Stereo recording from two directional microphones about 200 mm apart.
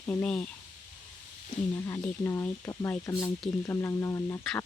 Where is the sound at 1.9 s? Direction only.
10° left (ahead or behind).